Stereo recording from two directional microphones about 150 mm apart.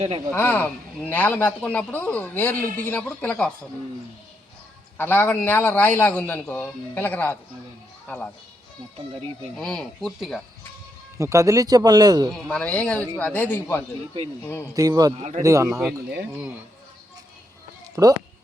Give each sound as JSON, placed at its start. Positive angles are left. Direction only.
{"t": 0.3, "sound": "speech", "side_deg": 10}
{"t": 4.9, "sound": "a child's voice", "side_deg": 15}
{"t": 9.6, "sound": "speech", "side_deg": 5}
{"t": 11.2, "sound": "speech", "side_deg": -20}
{"t": 12.3, "sound": "speech", "side_deg": 5}
{"t": 14.8, "sound": "speech", "side_deg": -25}
{"t": 15.1, "sound": "speech", "side_deg": -50}
{"t": 15.4, "sound": "speech", "side_deg": -20}
{"t": 15.7, "sound": "speech", "side_deg": 0}
{"t": 18.0, "sound": "speech", "side_deg": -15}